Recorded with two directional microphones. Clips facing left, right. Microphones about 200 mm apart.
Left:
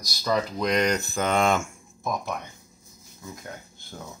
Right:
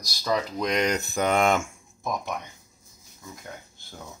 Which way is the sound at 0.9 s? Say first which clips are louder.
Even; 15° right (ahead or behind).